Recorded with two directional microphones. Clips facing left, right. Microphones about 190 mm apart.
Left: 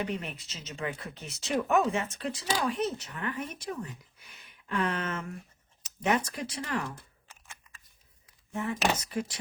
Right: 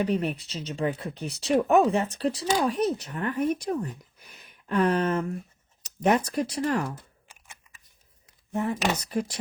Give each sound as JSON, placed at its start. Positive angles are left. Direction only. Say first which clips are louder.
{"t": 0.0, "sound": "speech", "louder": "right 8 dB", "side_deg": -35}
{"t": 6.9, "sound": "a sound", "louder": "right 5 dB", "side_deg": -15}
{"t": 8.5, "sound": "speech", "louder": "right 3 dB", "side_deg": -40}